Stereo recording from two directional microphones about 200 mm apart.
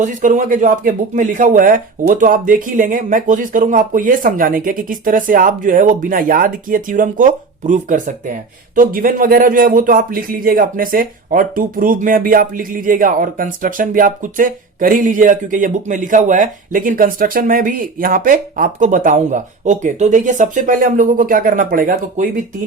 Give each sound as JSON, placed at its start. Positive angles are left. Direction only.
{"t": 0.0, "sound": "speech", "side_deg": -40}